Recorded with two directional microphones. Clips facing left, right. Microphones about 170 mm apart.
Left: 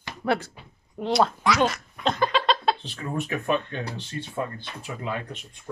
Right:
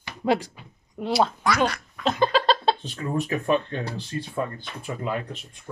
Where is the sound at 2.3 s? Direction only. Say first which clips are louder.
Right 2 dB; 35° right (ahead or behind).